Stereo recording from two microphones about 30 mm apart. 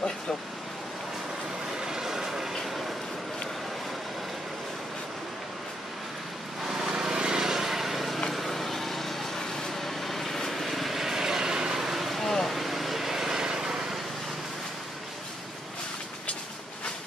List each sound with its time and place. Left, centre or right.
1.8 s vehicle: centre
6.9 s vehicle: right
12.0 s vehicle: centre